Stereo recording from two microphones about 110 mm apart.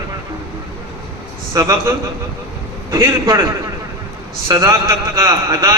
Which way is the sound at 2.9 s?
25° right (ahead or behind).